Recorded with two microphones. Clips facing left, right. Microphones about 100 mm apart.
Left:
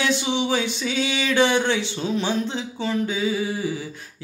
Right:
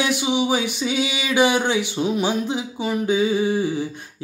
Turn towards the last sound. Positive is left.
turn(degrees=-20)  # may be behind; listen again after turning